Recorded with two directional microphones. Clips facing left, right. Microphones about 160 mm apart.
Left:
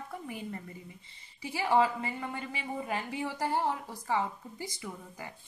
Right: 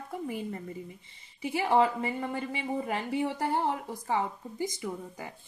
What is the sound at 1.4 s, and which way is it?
A woman's voice, 20° right (ahead or behind).